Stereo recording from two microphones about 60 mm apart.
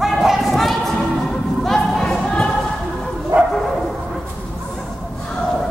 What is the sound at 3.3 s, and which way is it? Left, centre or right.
Bow-wow, right.